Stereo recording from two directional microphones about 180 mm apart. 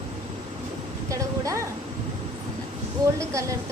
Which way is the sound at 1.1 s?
15° right (ahead or behind).